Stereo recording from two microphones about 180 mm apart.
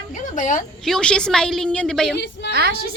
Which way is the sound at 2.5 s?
65° right (ahead or behind).